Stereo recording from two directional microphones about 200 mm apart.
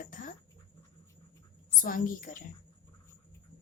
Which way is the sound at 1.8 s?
45° left (ahead or behind).